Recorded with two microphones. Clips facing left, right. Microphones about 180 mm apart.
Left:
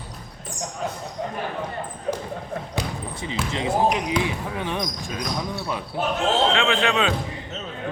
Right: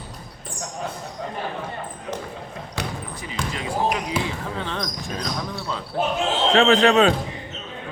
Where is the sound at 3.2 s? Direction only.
25° left (ahead or behind).